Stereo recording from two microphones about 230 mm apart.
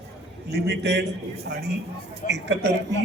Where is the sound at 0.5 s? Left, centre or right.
Right.